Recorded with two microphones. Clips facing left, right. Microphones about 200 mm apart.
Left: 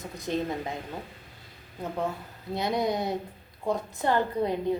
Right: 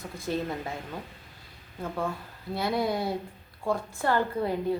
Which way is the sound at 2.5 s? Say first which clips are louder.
Even; 20° left (ahead or behind).